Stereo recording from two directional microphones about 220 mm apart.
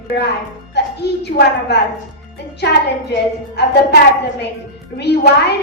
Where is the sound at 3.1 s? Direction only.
50° left (ahead or behind).